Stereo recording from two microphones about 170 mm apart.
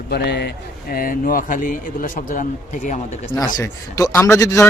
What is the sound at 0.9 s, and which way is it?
A man's voice, 60° left (ahead or behind).